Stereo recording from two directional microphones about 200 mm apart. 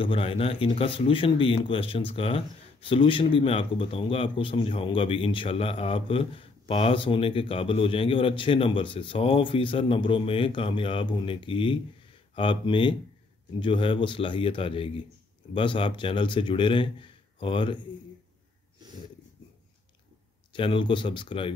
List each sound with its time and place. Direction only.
0.0 s speech: 25° left (ahead or behind)
20.5 s speech: 25° left (ahead or behind)